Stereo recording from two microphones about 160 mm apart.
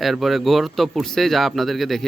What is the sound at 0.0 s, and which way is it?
Speech, centre (ahead or behind).